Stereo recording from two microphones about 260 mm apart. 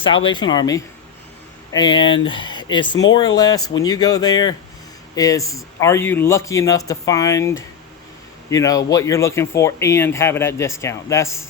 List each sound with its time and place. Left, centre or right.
0.3 s speech: centre